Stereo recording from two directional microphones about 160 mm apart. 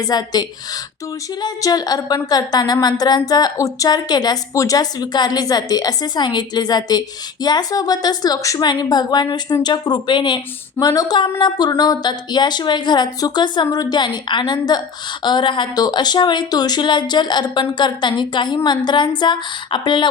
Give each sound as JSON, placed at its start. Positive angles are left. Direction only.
{"t": 0.0, "sound": "speech", "side_deg": 25}